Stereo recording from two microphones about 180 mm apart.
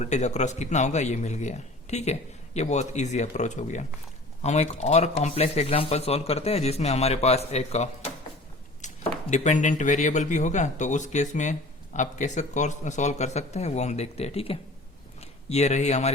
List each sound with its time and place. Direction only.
0.0 s speech: 40° left (ahead or behind)
8.8 s a sound: 40° left (ahead or behind)
9.3 s speech: 40° left (ahead or behind)